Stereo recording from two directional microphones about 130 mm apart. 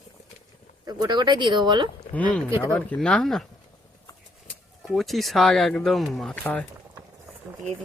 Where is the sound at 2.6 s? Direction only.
10° left (ahead or behind).